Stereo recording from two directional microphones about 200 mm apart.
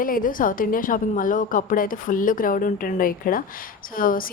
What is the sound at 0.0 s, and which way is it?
A woman's voice, 45° left (ahead or behind).